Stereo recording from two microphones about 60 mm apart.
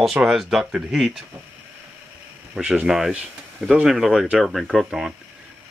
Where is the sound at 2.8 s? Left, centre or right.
Centre.